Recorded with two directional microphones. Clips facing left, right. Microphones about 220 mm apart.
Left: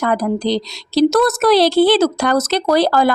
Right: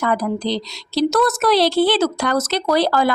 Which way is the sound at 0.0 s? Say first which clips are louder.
Left 3 dB; 40° left (ahead or behind).